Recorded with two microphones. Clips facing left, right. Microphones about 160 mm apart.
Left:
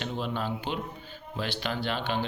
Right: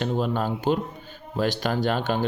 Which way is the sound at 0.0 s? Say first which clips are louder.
Right 7 dB; 45° right (ahead or behind).